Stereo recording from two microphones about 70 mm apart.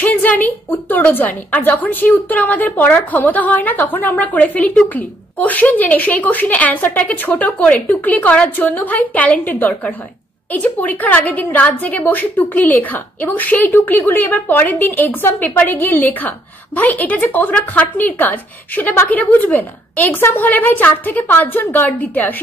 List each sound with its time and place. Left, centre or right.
0.0 s a woman's voice: left